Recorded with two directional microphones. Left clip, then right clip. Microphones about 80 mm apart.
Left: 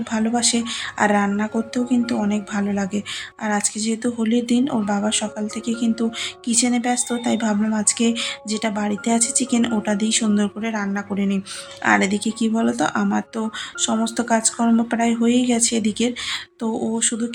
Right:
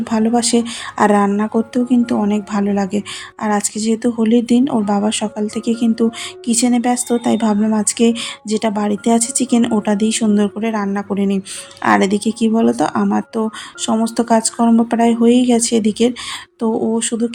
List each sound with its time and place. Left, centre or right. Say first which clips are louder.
0.0 s speech: right 5 dB; right